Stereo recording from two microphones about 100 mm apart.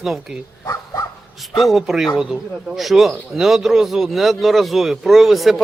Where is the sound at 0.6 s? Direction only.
30° left (ahead or behind).